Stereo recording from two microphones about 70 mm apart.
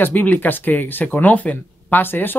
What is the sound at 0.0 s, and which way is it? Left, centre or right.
Speech, left.